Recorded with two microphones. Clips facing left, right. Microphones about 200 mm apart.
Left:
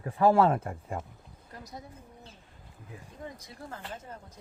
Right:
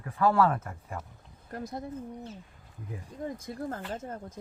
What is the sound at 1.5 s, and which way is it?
Speech, 55° right (ahead or behind).